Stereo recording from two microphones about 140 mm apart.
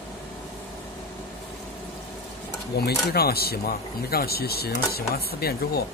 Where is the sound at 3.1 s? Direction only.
90° left.